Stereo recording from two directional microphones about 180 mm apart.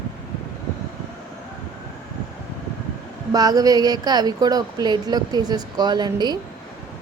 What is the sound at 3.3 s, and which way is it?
Speech, 20° right (ahead or behind).